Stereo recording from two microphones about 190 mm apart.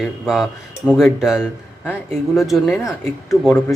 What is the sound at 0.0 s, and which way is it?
Speech, centre (ahead or behind).